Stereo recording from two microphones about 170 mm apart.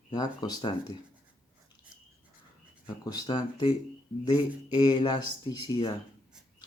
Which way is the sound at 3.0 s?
25° left (ahead or behind).